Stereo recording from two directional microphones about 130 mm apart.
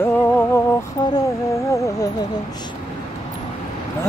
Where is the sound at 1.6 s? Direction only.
25° left (ahead or behind).